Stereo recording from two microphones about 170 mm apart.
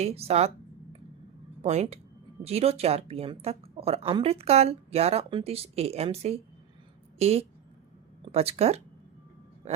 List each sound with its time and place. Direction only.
0.0 s speech: 35° right (ahead or behind)
1.6 s speech: 40° right (ahead or behind)